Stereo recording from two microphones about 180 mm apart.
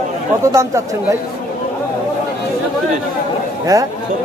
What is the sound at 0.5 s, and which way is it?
Speech, 15° right (ahead or behind).